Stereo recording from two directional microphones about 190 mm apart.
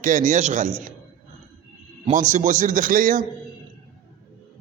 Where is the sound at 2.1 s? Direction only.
40° right (ahead or behind).